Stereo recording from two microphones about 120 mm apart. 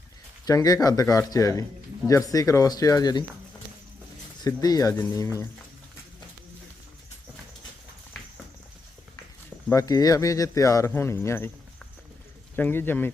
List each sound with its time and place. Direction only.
0.4 s speech: 30° left (ahead or behind)
4.4 s speech: 30° left (ahead or behind)
9.7 s speech: 30° left (ahead or behind)
12.5 s speech: 15° left (ahead or behind)